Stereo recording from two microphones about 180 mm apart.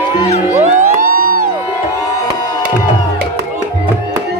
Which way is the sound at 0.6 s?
40° right (ahead or behind).